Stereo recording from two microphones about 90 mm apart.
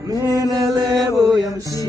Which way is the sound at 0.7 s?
45° right (ahead or behind).